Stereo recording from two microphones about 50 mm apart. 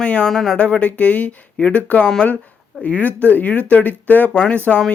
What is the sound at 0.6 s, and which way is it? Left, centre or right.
Speech, left.